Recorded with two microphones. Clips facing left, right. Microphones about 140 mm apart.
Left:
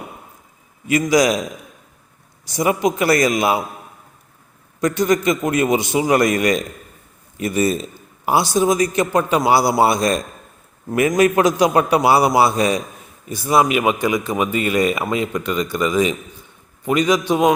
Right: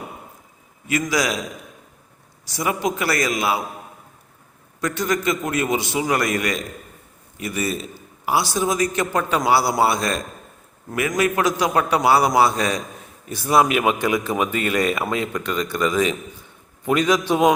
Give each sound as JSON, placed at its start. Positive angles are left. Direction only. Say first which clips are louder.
{"t": 1.1, "sound": "a man's voice", "louder": "left 8 dB", "side_deg": 20}
{"t": 2.4, "sound": "a man's voice", "louder": "left 5 dB", "side_deg": 20}
{"t": 4.9, "sound": "a man's voice", "louder": "left 4 dB", "side_deg": 20}
{"t": 13.2, "sound": "a man's voice", "louder": "left 1 dB", "side_deg": 0}